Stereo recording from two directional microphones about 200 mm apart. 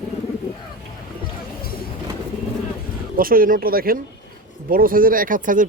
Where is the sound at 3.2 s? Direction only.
45° right (ahead or behind).